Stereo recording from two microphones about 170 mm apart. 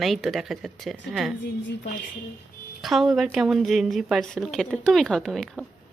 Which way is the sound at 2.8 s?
Centre (ahead or behind).